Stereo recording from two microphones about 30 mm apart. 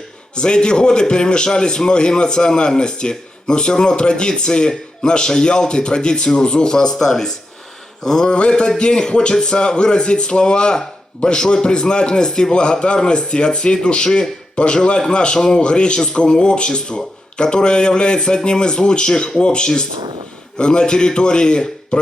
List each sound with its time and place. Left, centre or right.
0.3 s a man's voice: left
6.9 s speech: centre
8.3 s a man's voice: left